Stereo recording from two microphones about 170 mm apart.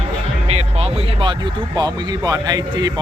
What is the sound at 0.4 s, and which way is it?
Speech, 35° right (ahead or behind).